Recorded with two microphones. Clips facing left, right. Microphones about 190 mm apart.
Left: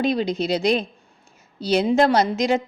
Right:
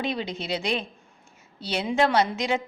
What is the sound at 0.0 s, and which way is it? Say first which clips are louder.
A woman's voice: left 8 dB; 40° left (ahead or behind).